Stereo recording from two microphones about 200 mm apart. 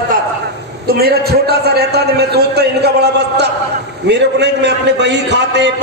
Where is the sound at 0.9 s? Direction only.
50° right (ahead or behind).